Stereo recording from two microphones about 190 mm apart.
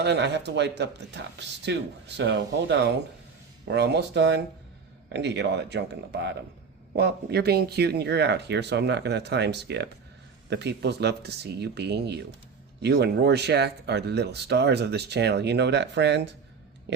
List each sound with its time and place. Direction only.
0.0 s speech: 65° right (ahead or behind)